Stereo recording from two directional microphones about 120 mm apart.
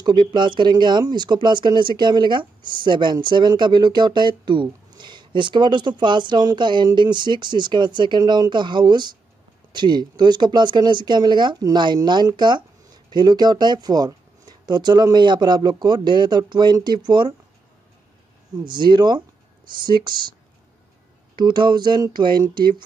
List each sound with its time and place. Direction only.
0.0 s speech: 40° right (ahead or behind)
18.6 s speech: 40° right (ahead or behind)
21.4 s speech: 40° right (ahead or behind)